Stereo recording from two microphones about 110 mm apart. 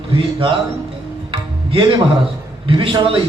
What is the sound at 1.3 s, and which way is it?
Music, 50° right (ahead or behind).